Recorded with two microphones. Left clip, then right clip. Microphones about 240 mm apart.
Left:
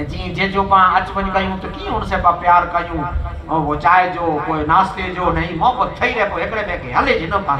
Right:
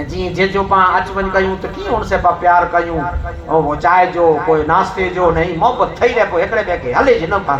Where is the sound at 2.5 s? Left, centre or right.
Left.